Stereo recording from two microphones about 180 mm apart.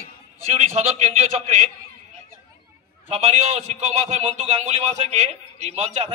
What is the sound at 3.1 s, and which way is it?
A man's voice, 35° right (ahead or behind).